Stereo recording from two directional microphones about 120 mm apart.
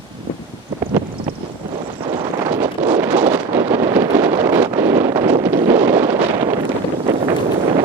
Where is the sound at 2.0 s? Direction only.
40° right (ahead or behind).